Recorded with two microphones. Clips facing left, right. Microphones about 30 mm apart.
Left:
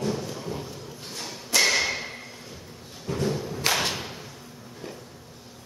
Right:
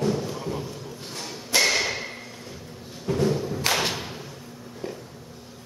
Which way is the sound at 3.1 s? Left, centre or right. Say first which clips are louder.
Right 4 dB; centre.